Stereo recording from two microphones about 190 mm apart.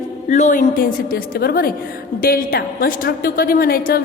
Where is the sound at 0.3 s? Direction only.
40° left (ahead or behind).